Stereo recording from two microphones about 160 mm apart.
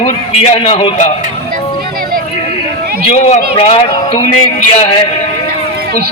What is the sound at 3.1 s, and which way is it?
A man's voice, 40° left (ahead or behind).